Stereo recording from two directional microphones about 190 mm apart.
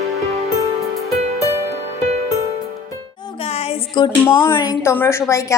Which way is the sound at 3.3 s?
30° left (ahead or behind).